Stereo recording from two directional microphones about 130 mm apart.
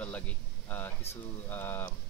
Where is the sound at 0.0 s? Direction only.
10° left (ahead or behind).